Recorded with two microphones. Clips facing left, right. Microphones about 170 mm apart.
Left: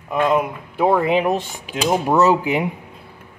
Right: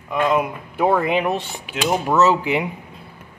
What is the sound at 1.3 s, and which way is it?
Speech, 40° left (ahead or behind).